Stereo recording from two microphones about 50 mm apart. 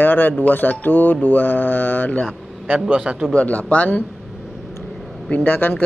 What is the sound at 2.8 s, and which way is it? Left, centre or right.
Speech, centre.